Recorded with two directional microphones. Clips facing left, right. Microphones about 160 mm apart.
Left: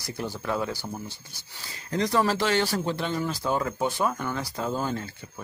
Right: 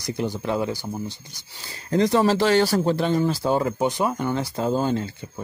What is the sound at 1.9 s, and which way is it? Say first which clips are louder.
Speech: right 6 dB; 30° right (ahead or behind).